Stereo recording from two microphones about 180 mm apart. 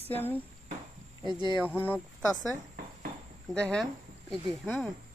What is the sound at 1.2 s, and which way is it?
Speech, 25° right (ahead or behind).